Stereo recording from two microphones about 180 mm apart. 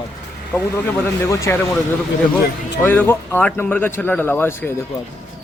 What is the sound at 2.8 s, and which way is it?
Speech, 10° left (ahead or behind).